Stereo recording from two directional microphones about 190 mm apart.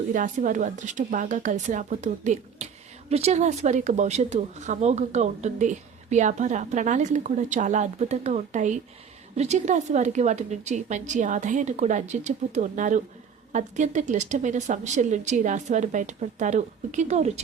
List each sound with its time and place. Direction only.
0.1 s speech: 45° right (ahead or behind)